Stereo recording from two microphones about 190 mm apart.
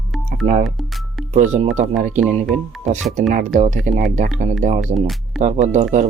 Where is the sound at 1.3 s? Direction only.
40° right (ahead or behind).